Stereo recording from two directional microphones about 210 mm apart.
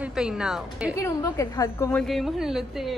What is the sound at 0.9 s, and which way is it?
A woman's voice, 15° left (ahead or behind).